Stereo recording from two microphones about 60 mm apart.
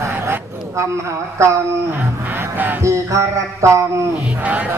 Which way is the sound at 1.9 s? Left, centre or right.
Right.